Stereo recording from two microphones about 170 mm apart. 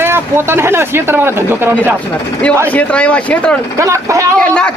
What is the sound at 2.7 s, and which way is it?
Speech, 10° left (ahead or behind).